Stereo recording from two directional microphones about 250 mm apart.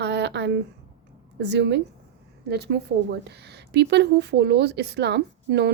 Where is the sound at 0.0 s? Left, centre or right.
Right.